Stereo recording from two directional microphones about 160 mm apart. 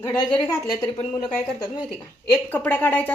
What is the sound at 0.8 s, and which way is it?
Speech, 25° left (ahead or behind).